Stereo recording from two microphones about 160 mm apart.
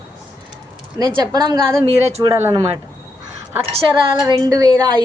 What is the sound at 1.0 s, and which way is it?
Speech, 25° right (ahead or behind).